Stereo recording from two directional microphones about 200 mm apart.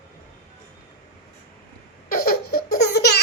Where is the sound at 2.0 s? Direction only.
50° left (ahead or behind).